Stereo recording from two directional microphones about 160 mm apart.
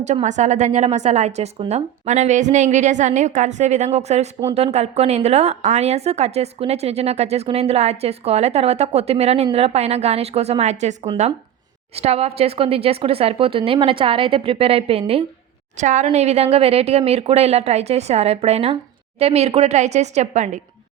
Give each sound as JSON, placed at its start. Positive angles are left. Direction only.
{"t": 0.0, "sound": "a woman's voice", "side_deg": -45}
{"t": 15.8, "sound": "a woman's voice", "side_deg": -50}